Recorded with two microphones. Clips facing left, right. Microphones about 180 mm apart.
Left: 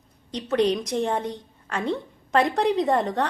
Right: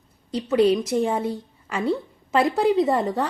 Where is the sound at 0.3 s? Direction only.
Centre (ahead or behind).